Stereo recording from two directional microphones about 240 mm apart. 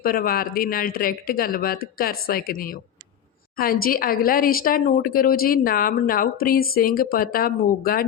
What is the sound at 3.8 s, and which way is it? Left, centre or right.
Speech, left.